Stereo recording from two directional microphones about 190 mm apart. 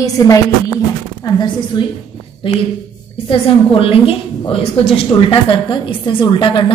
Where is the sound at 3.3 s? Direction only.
30° left (ahead or behind).